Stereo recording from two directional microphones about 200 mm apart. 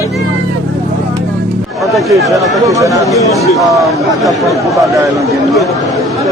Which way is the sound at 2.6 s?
15° right (ahead or behind).